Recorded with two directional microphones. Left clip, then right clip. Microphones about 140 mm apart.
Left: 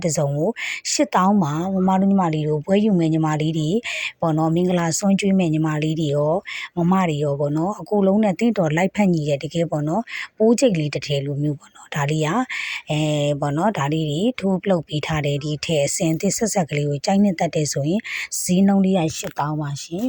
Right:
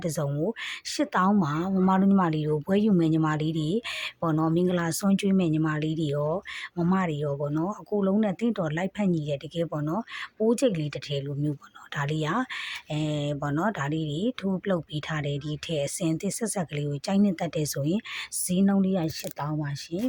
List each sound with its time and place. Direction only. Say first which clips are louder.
0.3 s speech: left 7 dB; 20° left (ahead or behind)
0.6 s speech: left 8 dB; 30° left (ahead or behind)